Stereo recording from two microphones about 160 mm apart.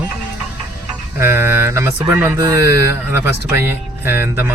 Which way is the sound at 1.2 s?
15° right (ahead or behind).